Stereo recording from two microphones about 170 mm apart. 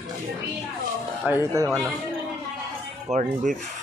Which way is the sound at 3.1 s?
45° right (ahead or behind).